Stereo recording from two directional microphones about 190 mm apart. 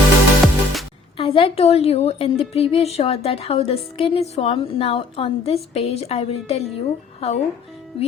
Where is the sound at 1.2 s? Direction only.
30° left (ahead or behind).